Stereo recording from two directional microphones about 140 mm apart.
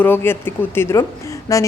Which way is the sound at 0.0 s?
15° left (ahead or behind).